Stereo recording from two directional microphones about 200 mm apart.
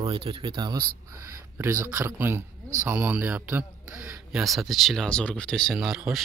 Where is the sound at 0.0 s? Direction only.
25° right (ahead or behind).